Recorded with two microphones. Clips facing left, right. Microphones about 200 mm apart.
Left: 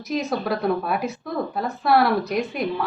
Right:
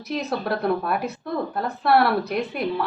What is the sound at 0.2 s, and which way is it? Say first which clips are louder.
Speech: left 1 dB; centre (ahead or behind).